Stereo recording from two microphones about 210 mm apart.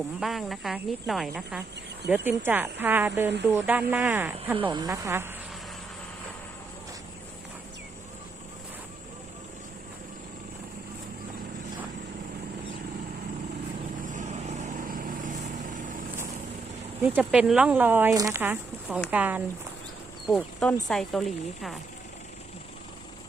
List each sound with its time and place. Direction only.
0.2 s speech: centre (ahead or behind)
14.1 s vehicle: 35° right (ahead or behind)
17.0 s speech: 5° right (ahead or behind)